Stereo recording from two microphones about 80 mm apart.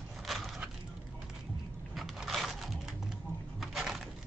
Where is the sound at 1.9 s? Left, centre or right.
Centre.